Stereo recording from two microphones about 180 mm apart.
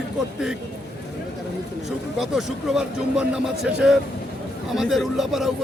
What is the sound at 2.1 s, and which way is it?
Speech, 5° right (ahead or behind).